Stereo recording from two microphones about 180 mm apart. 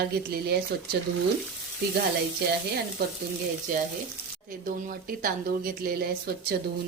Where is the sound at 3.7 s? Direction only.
50° right (ahead or behind).